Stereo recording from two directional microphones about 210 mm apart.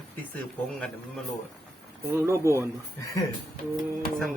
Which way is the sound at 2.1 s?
15° right (ahead or behind).